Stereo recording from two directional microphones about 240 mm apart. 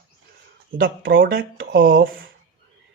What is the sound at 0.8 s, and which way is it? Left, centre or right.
Speech, right.